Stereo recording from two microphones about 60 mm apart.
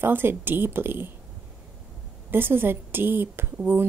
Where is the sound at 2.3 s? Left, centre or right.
Right.